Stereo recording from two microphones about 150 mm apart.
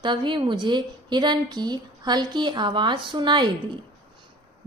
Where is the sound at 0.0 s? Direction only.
30° right (ahead or behind).